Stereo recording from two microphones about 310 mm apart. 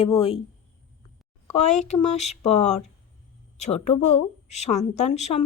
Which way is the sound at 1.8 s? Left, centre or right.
Left.